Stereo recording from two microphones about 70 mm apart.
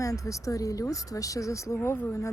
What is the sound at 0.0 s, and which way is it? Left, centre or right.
Speech, left.